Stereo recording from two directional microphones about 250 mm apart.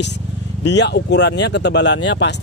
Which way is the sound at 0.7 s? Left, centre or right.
Left.